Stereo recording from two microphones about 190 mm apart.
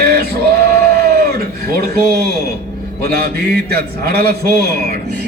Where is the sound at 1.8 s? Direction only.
55° right (ahead or behind).